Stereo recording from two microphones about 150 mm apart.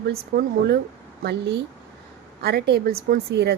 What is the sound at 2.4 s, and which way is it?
Speech, 90° right.